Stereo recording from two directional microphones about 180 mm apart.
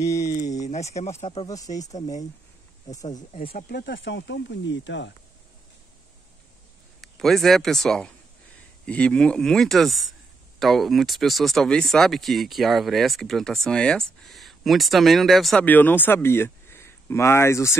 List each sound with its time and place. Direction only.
0.3 s speech: 40° left (ahead or behind)
1.9 s speech: 40° left (ahead or behind)
2.9 s speech: 20° left (ahead or behind)
3.3 s speech: 50° left (ahead or behind); by 5.1 s 90° left
7.0 s speech: centre (ahead or behind)